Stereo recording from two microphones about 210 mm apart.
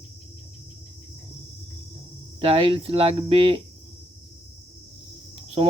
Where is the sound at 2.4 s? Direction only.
25° right (ahead or behind).